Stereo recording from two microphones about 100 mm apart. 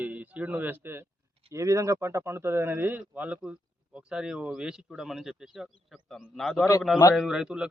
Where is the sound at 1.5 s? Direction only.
35° right (ahead or behind).